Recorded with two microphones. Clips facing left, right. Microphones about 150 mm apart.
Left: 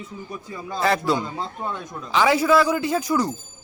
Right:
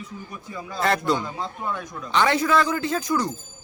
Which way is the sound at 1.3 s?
20° left (ahead or behind).